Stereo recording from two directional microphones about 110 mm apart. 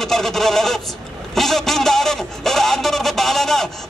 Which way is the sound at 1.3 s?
Centre (ahead or behind).